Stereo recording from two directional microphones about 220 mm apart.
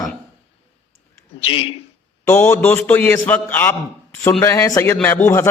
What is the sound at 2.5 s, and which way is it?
A man's voice, 10° left (ahead or behind).